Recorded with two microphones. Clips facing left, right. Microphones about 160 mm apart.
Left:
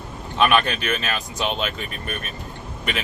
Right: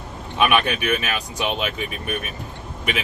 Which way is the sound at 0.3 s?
10° right (ahead or behind).